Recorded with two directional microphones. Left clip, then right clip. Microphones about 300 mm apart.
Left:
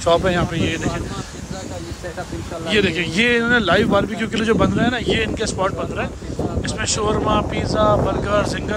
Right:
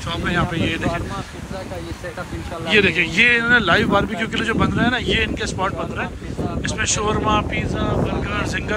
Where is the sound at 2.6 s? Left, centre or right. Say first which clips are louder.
Right 3 dB; centre.